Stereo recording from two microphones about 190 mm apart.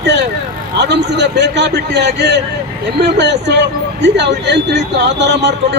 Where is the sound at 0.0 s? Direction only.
65° right (ahead or behind).